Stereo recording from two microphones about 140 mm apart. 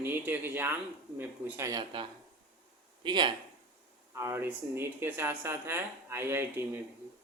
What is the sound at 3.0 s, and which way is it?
Speech, 35° right (ahead or behind).